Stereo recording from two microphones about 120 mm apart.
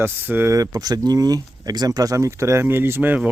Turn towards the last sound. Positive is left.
turn(degrees=-10)  # may be behind; listen again after turning